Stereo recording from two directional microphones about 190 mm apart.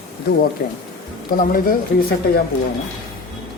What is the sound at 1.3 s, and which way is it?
Speech, 45° left (ahead or behind).